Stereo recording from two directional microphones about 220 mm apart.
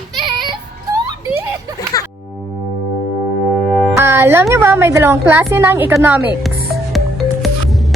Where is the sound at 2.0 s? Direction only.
15° left (ahead or behind).